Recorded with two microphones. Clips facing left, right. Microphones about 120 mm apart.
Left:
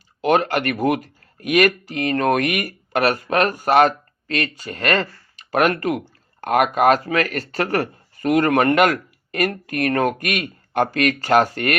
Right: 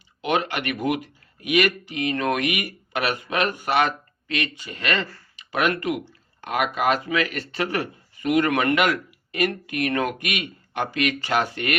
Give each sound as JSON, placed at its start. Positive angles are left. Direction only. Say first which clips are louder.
{"t": 0.2, "sound": "speech", "louder": "left 6 dB", "side_deg": 45}